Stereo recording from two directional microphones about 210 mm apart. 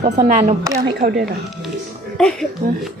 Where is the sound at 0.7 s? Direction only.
45° right (ahead or behind).